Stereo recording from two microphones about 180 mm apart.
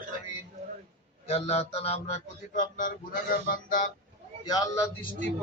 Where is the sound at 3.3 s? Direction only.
50° left (ahead or behind).